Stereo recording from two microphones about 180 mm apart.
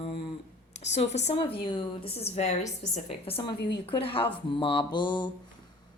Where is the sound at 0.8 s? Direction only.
40° left (ahead or behind).